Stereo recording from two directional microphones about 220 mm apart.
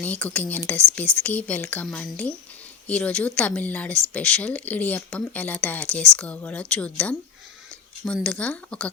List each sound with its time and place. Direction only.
0.0 s speech: 5° left (ahead or behind)